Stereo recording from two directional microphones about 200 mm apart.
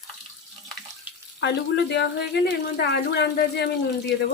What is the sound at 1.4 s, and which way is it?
Speech, 60° left (ahead or behind).